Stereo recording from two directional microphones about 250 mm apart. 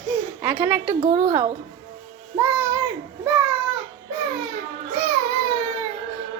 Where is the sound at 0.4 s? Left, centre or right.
Centre.